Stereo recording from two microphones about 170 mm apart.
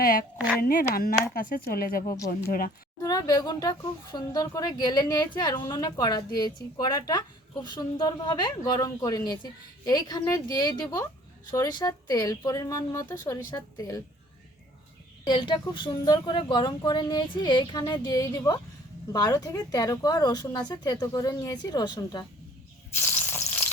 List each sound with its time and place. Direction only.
0.0 s speech: 60° left (ahead or behind)
3.0 s speech: 20° left (ahead or behind)
15.3 s speech: 25° left (ahead or behind)
23.0 s drip: 10° left (ahead or behind)